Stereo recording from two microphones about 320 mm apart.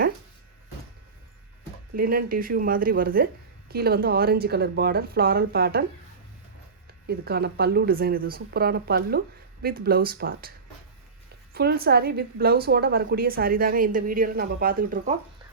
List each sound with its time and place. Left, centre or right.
2.0 s a woman's voice: right
7.1 s a woman's voice: right
11.5 s a woman's voice: right